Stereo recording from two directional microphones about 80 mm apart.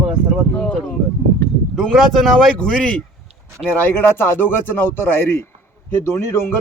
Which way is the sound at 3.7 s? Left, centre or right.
Left.